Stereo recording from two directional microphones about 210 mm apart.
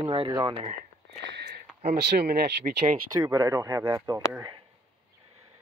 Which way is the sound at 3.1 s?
15° right (ahead or behind).